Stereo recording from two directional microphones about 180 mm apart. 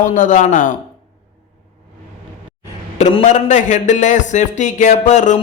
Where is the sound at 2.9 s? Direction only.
40° left (ahead or behind).